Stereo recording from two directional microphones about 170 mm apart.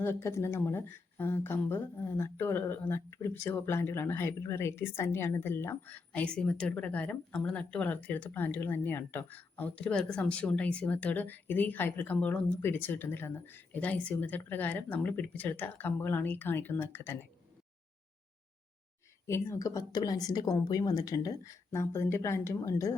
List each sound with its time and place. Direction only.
0.0 s speech: 15° left (ahead or behind)
19.3 s speech: 15° left (ahead or behind)